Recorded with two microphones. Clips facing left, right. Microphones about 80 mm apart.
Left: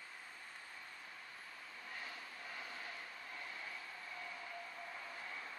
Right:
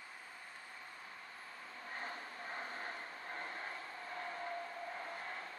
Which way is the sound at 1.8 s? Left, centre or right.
Right.